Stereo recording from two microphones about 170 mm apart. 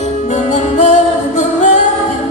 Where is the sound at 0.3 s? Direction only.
40° left (ahead or behind).